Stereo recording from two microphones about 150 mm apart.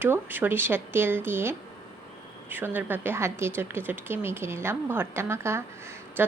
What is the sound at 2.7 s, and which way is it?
A woman's voice, 15° right (ahead or behind).